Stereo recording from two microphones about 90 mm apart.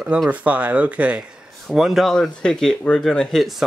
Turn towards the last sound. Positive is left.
turn(degrees=0)  # may be behind; listen again after turning